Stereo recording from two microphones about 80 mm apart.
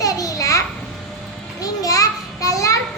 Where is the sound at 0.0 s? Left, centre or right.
Left.